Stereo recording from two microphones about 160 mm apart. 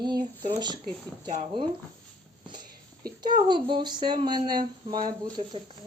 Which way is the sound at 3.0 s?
25° right (ahead or behind).